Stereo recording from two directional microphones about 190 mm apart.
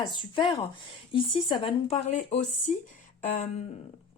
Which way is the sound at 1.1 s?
30° left (ahead or behind).